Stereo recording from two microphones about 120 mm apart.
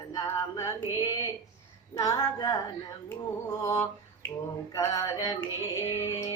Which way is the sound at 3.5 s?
25° left (ahead or behind).